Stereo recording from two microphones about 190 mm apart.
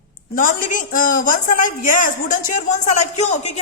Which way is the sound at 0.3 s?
45° left (ahead or behind).